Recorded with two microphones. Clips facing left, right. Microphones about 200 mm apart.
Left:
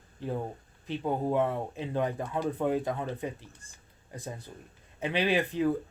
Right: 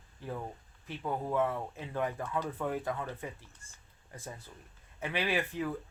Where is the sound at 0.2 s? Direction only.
25° left (ahead or behind).